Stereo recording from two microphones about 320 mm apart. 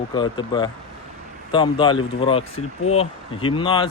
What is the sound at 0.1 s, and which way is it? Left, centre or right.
Speech, centre.